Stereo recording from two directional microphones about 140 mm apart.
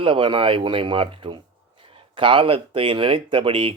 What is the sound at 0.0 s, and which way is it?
Speech, 35° right (ahead or behind).